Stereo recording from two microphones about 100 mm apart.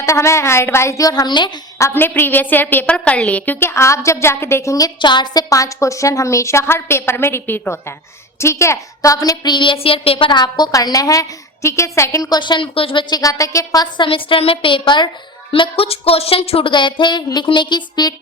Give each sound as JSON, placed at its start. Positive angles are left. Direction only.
{"t": 0.0, "sound": "a woman's voice", "side_deg": 30}
{"t": 1.8, "sound": "a woman's voice", "side_deg": 20}
{"t": 4.9, "sound": "a woman's voice", "side_deg": 50}
{"t": 13.9, "sound": "a woman's voice", "side_deg": 60}
{"t": 15.5, "sound": "speech", "side_deg": 60}